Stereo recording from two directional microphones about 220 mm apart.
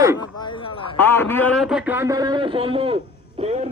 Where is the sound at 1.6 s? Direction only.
5° right (ahead or behind).